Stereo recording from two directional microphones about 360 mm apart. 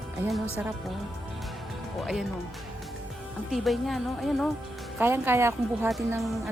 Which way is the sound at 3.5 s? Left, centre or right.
Centre.